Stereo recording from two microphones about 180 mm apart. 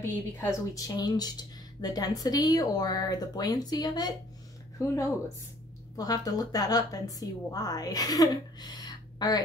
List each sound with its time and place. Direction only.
0.0 s a woman's voice: 15° left (ahead or behind)